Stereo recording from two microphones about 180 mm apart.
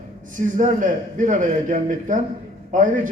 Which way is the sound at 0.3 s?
45° right (ahead or behind).